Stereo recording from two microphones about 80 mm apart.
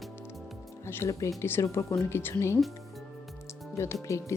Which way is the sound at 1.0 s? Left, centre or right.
Left.